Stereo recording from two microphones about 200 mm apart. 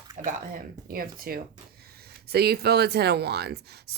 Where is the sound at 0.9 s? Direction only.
45° right (ahead or behind).